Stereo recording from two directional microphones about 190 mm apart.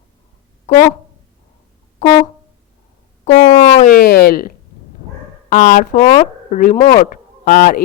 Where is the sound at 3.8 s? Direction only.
55° left (ahead or behind).